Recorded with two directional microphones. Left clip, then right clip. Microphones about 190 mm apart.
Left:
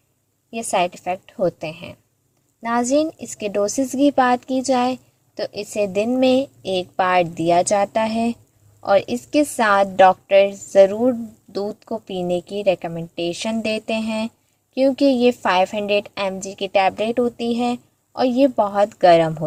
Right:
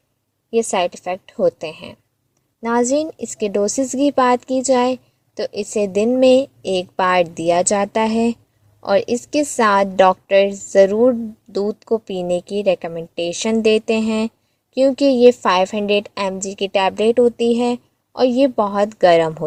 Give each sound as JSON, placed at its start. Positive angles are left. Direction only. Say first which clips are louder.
{"t": 0.6, "sound": "speech", "louder": "left 1 dB", "side_deg": -45}